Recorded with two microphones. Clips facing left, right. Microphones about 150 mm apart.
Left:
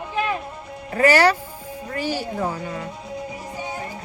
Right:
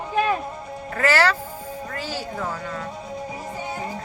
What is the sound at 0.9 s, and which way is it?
Speech, 15° left (ahead or behind).